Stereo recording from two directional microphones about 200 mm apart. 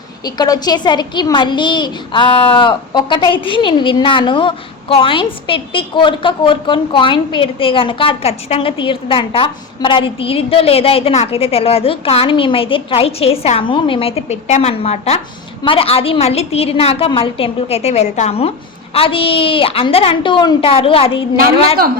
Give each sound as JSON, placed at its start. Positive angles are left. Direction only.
{"t": 0.3, "sound": "a child's voice", "side_deg": 20}